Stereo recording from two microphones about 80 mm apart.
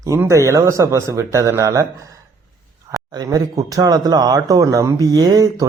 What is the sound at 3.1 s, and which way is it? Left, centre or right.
Speech, right.